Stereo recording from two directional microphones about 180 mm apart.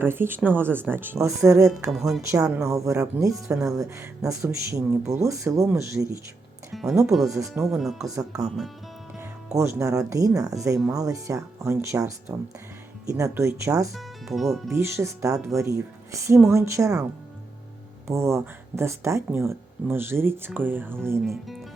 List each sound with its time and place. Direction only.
0.0 s speech: 10° right (ahead or behind)
1.9 s speech: centre (ahead or behind)
2.3 s speech: 15° right (ahead or behind)
7.0 s speech: centre (ahead or behind)
7.3 s speech: 15° right (ahead or behind)
9.6 s speech: 15° right (ahead or behind)
13.9 s speech: centre (ahead or behind)
14.7 s speech: 15° right (ahead or behind)
18.1 s speech: 15° right (ahead or behind)